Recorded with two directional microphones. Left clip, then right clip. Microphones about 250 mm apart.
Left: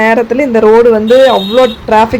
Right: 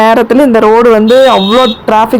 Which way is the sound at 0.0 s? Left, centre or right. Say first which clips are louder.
Right 4 dB; centre.